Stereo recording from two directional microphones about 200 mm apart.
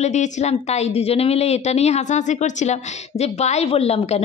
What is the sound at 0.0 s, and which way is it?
A woman's voice, 35° left (ahead or behind).